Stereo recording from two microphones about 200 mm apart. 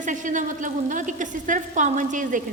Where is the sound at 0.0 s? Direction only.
40° right (ahead or behind).